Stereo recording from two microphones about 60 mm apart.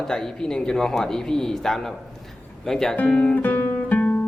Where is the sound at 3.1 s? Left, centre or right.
Centre.